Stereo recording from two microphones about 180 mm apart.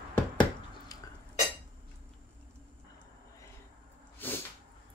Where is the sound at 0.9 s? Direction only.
20° left (ahead or behind).